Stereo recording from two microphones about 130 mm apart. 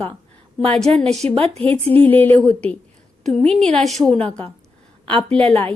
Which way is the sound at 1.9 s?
15° left (ahead or behind).